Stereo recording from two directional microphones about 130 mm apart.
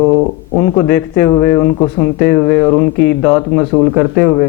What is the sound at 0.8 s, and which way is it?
A man's voice, 10° left (ahead or behind).